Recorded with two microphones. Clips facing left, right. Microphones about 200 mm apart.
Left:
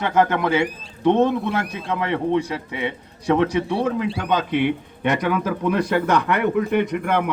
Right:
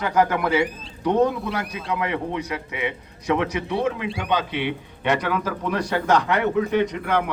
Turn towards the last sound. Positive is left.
turn(degrees=55)  # may be behind; listen again after turning